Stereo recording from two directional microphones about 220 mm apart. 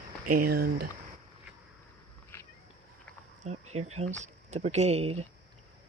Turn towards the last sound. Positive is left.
turn(degrees=-30)  # may be behind; listen again after turning